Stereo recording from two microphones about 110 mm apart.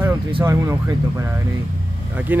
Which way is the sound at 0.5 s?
25° right (ahead or behind).